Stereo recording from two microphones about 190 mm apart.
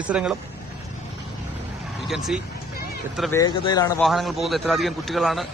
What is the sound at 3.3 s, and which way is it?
Speech, 20° left (ahead or behind).